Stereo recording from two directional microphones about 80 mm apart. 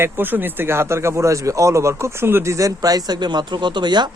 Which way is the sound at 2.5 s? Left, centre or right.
Right.